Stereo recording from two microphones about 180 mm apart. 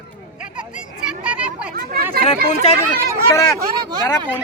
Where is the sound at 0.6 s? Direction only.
5° right (ahead or behind).